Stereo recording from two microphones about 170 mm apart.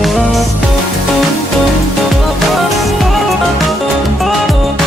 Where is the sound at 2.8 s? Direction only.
Centre (ahead or behind).